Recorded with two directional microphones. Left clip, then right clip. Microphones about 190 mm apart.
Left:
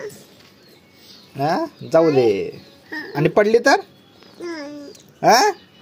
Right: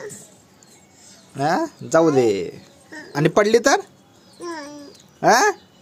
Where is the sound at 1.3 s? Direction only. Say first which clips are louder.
Even; 10° right (ahead or behind).